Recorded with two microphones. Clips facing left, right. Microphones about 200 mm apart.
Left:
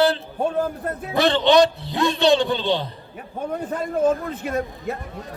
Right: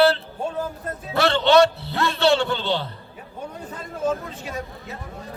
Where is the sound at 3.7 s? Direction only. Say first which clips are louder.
Left 5 dB; 55° left (ahead or behind).